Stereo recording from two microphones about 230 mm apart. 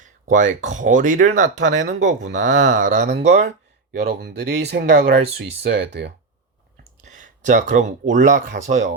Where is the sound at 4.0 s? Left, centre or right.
Right.